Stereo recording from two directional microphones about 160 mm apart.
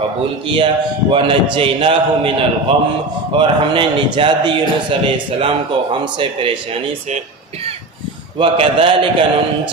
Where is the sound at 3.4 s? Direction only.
30° right (ahead or behind).